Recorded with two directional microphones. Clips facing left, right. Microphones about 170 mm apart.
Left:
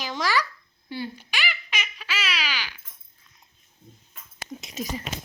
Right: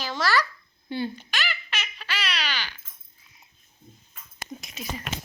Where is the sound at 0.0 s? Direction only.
15° left (ahead or behind).